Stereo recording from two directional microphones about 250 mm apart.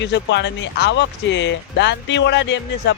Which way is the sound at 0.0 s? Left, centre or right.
Left.